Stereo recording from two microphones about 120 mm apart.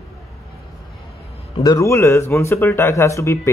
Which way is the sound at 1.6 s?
30° left (ahead or behind).